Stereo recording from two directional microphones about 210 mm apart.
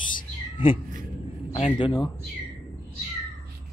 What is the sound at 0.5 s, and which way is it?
Cat, 25° left (ahead or behind).